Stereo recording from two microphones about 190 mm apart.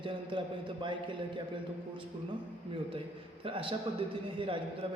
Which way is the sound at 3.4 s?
30° right (ahead or behind).